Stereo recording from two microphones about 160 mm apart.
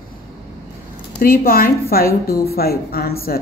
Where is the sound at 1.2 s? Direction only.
65° left (ahead or behind).